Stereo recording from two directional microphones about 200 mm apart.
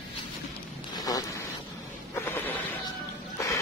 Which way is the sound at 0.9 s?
20° left (ahead or behind).